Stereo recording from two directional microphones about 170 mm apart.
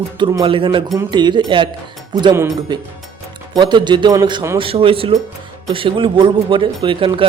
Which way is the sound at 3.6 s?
25° right (ahead or behind).